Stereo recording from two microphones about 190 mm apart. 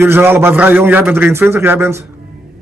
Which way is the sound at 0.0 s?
10° right (ahead or behind).